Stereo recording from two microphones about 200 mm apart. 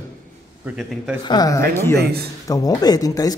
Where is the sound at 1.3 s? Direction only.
20° left (ahead or behind).